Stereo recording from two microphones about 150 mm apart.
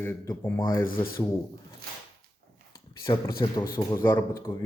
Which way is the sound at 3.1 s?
25° left (ahead or behind).